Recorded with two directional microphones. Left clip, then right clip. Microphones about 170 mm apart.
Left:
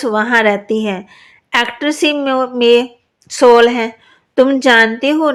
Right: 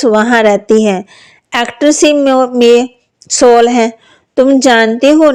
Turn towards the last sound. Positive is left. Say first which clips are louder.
# right 7 dB
turn(degrees=-25)  # may be behind; listen again after turning